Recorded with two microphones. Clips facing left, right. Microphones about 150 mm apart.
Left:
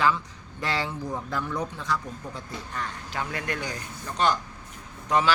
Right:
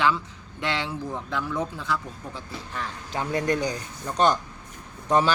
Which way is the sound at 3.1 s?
25° right (ahead or behind).